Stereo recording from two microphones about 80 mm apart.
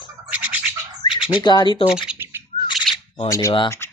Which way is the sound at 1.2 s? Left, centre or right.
Left.